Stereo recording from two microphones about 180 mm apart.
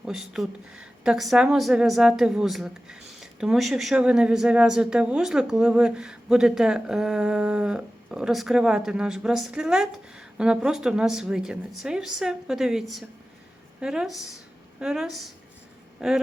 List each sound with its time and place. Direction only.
0.0 s speech: 5° right (ahead or behind)